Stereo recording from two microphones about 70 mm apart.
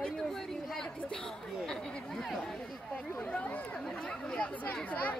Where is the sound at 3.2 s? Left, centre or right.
Centre.